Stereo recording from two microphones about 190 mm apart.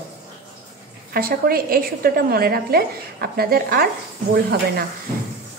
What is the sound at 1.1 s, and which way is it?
A woman's voice, 50° right (ahead or behind).